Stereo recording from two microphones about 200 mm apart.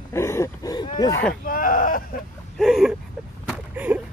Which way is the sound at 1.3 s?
45° left (ahead or behind).